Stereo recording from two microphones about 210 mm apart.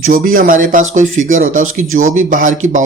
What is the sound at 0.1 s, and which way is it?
Speech, 40° right (ahead or behind).